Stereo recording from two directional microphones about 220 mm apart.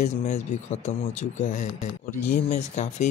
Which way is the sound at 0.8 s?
35° left (ahead or behind).